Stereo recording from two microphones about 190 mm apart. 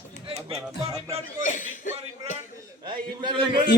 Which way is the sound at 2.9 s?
25° right (ahead or behind).